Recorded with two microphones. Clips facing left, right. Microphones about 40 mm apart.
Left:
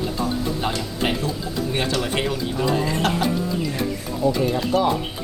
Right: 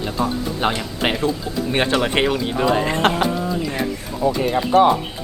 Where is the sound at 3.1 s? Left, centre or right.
Centre.